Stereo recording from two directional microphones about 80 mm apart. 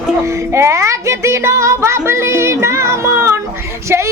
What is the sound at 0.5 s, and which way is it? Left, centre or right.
Speech, right.